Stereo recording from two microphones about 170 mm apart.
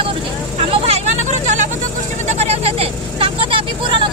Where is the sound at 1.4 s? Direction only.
45° right (ahead or behind).